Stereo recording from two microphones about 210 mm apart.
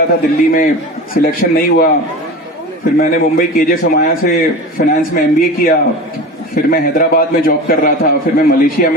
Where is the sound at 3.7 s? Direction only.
40° left (ahead or behind).